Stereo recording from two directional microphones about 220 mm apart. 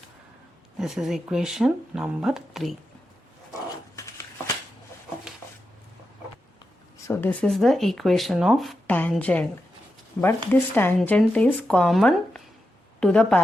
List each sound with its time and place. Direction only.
0.8 s speech: centre (ahead or behind)
3.9 s a sound: 15° left (ahead or behind)
7.1 s speech: 10° left (ahead or behind)